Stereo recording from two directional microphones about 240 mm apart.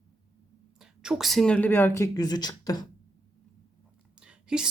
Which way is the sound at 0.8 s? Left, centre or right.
Centre.